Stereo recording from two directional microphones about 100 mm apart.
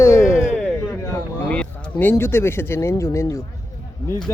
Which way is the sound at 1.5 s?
15° left (ahead or behind).